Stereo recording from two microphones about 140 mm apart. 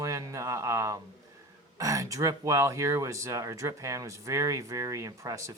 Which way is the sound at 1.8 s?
25° right (ahead or behind).